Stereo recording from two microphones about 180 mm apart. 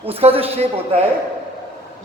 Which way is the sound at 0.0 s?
35° right (ahead or behind).